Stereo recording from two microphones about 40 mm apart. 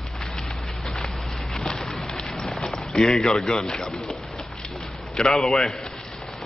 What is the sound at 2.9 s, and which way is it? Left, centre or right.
Speech, centre.